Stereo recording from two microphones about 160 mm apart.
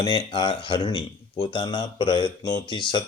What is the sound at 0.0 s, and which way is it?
Speech, 30° left (ahead or behind).